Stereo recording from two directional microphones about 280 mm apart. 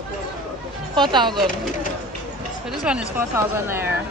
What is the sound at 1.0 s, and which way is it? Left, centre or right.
Speech, centre.